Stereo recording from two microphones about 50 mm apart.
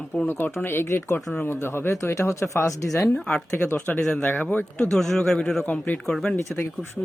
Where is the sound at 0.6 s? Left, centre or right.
Left.